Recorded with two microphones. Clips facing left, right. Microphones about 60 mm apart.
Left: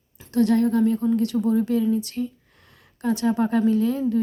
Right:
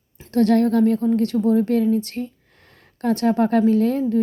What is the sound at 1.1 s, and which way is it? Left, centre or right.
Speech, right.